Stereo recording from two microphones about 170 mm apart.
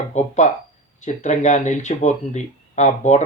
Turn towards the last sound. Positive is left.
turn(degrees=45)  # may be behind; listen again after turning